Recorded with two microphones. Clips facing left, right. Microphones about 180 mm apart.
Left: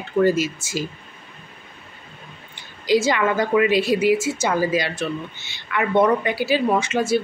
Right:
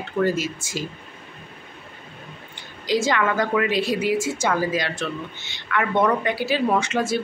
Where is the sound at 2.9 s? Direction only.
5° left (ahead or behind).